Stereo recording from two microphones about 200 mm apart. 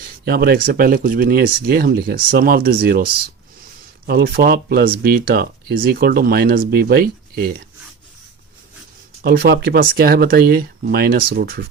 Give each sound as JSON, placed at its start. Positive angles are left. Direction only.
{"t": 0.3, "sound": "speech", "side_deg": -50}
{"t": 4.0, "sound": "speech", "side_deg": -50}
{"t": 9.2, "sound": "speech", "side_deg": -50}